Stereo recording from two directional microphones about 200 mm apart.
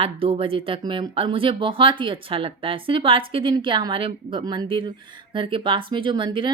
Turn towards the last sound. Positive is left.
turn(degrees=-25)  # may be behind; listen again after turning